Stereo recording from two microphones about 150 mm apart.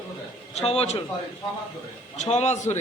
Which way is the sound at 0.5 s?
40° left (ahead or behind).